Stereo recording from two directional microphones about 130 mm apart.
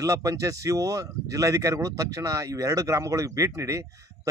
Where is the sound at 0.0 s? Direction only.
25° right (ahead or behind).